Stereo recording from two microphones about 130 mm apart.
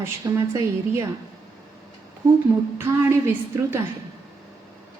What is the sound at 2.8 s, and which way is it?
Speech, 20° right (ahead or behind).